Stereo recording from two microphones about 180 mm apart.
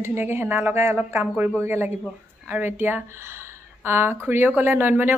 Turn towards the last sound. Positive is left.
turn(degrees=-10)  # may be behind; listen again after turning